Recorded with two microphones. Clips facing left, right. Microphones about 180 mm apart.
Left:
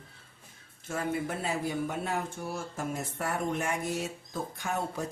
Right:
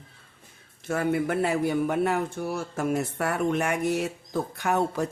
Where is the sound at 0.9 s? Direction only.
65° right (ahead or behind).